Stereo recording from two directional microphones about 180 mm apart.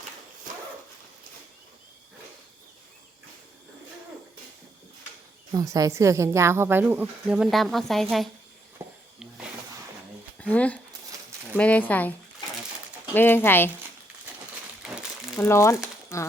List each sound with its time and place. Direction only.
5.5 s a woman's voice: 20° right (ahead or behind); by 8.3 s centre (ahead or behind)
8.8 s a sound: 10° right (ahead or behind)
10.4 s speech: 10° left (ahead or behind)
13.1 s speech: 10° left (ahead or behind)
14.8 s crumpling: 5° right (ahead or behind)
15.4 s speech: 15° left (ahead or behind)